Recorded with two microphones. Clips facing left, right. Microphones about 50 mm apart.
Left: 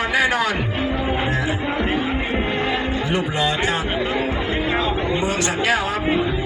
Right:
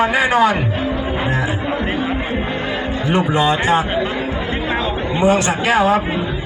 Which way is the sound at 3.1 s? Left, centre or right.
Right.